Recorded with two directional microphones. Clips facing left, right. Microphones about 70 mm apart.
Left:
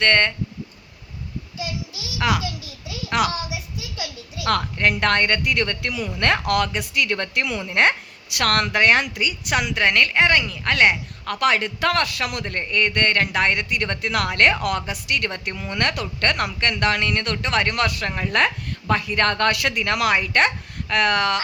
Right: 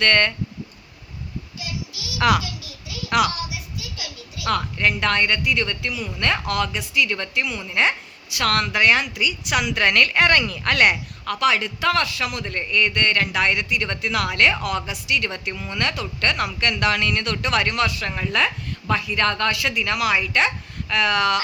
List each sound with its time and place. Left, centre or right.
0.0 s a woman's voice: left
2.4 s a sound: left
4.4 s a woman's voice: left
5.9 s speech: centre
6.1 s a woman's voice: left
7.4 s a woman's voice: left
9.7 s a woman's voice: left
11.3 s a woman's voice: left
18.1 s speech: left
18.3 s a woman's voice: left
19.5 s a woman's voice: left